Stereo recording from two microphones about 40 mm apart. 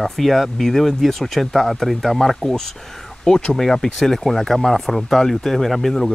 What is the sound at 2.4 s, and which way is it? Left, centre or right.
Speech, centre.